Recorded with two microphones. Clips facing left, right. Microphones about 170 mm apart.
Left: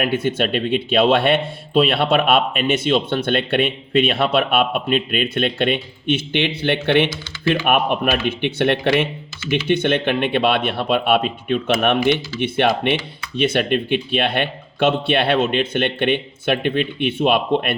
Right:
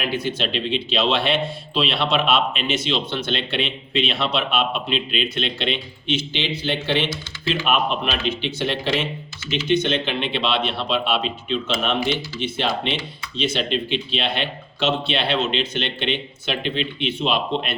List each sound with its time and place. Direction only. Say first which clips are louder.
0.0 s a man's voice: left 5 dB; 55° left (ahead or behind)